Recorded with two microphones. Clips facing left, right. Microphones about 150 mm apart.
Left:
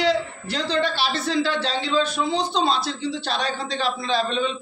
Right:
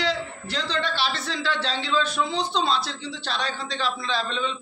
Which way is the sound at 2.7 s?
5° left (ahead or behind).